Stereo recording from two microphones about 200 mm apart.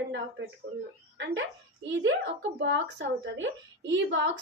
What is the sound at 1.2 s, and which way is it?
Speech, 65° right (ahead or behind).